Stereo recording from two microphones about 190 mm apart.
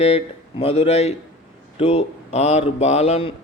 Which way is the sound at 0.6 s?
30° left (ahead or behind).